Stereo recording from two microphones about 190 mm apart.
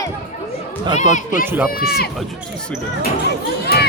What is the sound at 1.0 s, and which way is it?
Speech, 40° left (ahead or behind).